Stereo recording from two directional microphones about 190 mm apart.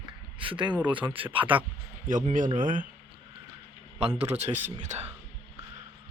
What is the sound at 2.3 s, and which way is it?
Speech, 45° right (ahead or behind).